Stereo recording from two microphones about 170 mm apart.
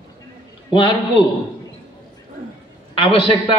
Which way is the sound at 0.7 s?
30° left (ahead or behind).